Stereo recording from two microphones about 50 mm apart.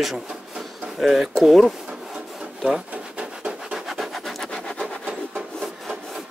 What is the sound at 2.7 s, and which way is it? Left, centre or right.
Rub, right.